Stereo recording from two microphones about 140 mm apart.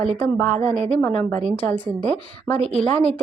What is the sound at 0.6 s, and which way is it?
Speech, 50° right (ahead or behind).